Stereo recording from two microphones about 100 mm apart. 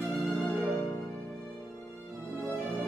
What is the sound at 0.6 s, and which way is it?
Music, 15° left (ahead or behind).